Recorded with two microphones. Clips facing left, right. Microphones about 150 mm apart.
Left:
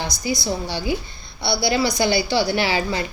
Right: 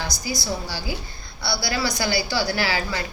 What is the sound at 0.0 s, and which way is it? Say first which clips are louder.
A woman's voice: left 4 dB; 20° left (ahead or behind).